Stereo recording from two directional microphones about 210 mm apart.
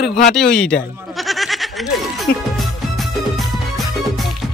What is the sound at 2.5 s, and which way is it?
Music, centre (ahead or behind).